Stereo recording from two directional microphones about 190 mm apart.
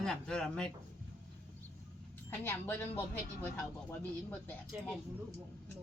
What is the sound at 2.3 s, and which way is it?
Speech, 10° left (ahead or behind).